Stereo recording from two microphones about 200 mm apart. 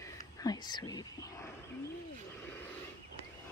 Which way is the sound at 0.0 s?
20° left (ahead or behind).